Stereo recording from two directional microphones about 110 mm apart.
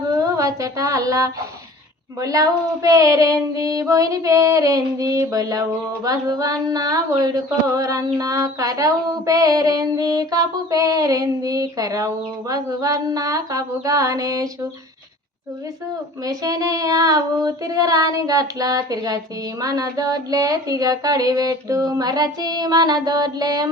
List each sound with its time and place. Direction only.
0.1 s a sound: 30° right (ahead or behind)
2.2 s female singing: 30° right (ahead or behind)
16.2 s female singing: 35° right (ahead or behind)